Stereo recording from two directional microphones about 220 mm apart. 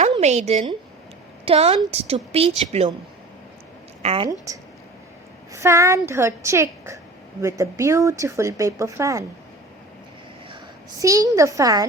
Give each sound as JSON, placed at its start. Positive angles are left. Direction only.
{"t": 0.1, "sound": "a woman's voice", "side_deg": -30}
{"t": 4.0, "sound": "a woman's voice", "side_deg": -25}
{"t": 11.0, "sound": "speech", "side_deg": -15}